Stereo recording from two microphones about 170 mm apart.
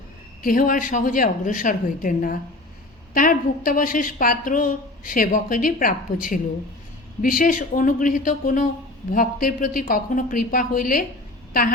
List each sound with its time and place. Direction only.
0.4 s a woman's voice: 55° left (ahead or behind)